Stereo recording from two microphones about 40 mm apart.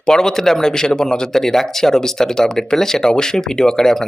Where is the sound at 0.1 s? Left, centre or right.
Centre.